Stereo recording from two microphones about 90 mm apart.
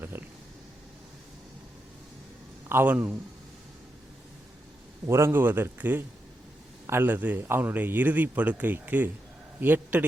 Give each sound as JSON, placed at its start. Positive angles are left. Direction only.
{"t": 0.0, "sound": "a sound", "side_deg": -25}
{"t": 2.6, "sound": "a man's voice", "side_deg": -25}
{"t": 5.0, "sound": "a man's voice", "side_deg": -30}